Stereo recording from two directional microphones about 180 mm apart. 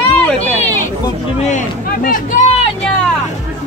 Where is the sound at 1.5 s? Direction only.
50° left (ahead or behind).